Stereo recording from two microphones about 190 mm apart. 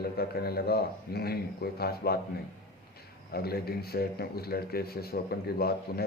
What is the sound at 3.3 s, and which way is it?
A man's voice, 55° left (ahead or behind).